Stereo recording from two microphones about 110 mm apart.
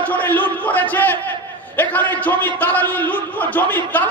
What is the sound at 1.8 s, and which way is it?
A man's voice, 15° left (ahead or behind).